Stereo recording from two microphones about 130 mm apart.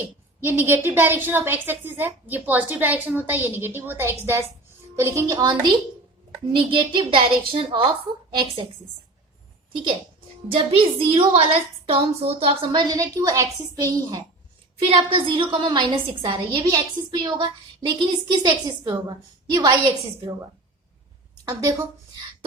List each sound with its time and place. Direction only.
0.4 s a woman's voice: 15° right (ahead or behind); by 8.6 s 35° right (ahead or behind)
10.5 s a woman's voice: 45° right (ahead or behind); by 14.3 s 30° right (ahead or behind)
14.8 s a woman's voice: 40° right (ahead or behind)
21.4 s a woman's voice: 20° right (ahead or behind)